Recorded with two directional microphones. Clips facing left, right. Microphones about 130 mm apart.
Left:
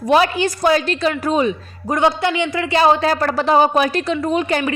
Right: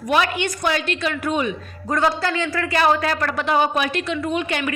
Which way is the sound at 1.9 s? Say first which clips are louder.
Left 4 dB; 20° left (ahead or behind).